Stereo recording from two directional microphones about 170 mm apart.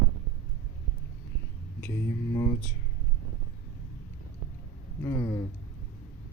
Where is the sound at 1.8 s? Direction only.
15° left (ahead or behind).